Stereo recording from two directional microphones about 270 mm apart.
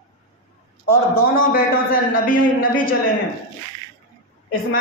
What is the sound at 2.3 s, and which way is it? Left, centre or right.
Speech, left.